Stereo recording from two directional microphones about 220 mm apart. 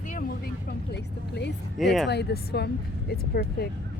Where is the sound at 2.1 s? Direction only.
50° left (ahead or behind).